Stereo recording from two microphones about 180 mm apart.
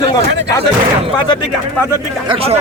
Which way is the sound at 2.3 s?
30° right (ahead or behind).